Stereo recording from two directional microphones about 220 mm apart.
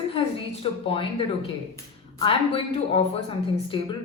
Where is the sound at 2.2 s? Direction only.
25° left (ahead or behind).